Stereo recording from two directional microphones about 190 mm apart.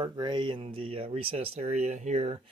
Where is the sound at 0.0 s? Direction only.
25° right (ahead or behind).